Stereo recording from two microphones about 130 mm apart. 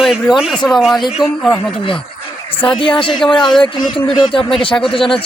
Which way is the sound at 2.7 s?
40° left (ahead or behind).